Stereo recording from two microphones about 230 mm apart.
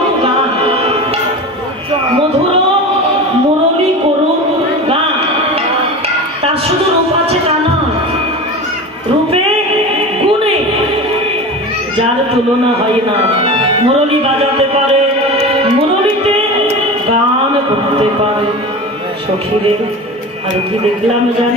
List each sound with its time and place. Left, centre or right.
0.7 s music: right
13.4 s music: right